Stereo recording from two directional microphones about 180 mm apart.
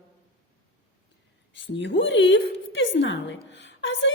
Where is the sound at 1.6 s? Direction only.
85° left.